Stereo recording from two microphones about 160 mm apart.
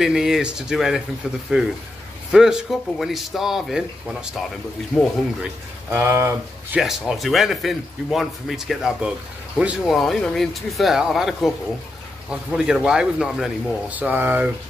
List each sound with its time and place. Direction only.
0.0 s a man's voice: 5° right (ahead or behind)
5.9 s speech: 15° right (ahead or behind)
6.8 s a man's voice: centre (ahead or behind)